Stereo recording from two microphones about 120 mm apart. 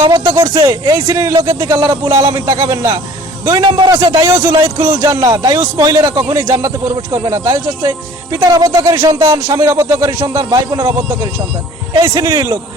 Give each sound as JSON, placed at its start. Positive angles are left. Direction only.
{"t": 0.1, "sound": "a man's voice", "side_deg": -30}
{"t": 11.9, "sound": "speech", "side_deg": -30}